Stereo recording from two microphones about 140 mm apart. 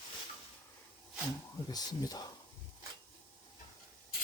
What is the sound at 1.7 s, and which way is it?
Speech, 25° left (ahead or behind).